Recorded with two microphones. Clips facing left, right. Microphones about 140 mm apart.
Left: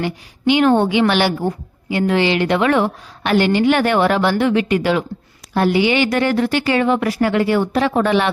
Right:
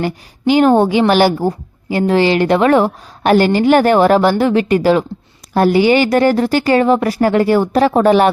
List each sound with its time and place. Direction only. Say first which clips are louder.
0.0 s a woman's voice: right 2 dB; 40° right (ahead or behind)